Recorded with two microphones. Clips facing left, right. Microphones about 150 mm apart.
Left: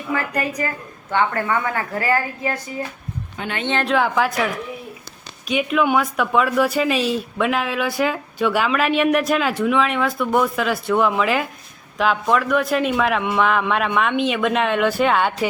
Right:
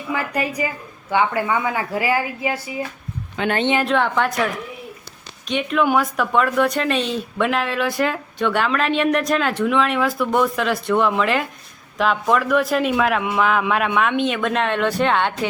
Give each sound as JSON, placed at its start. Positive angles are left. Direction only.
{"t": 0.1, "sound": "speech", "side_deg": -10}
{"t": 3.4, "sound": "a man's voice", "side_deg": -90}
{"t": 3.8, "sound": "speech", "side_deg": 5}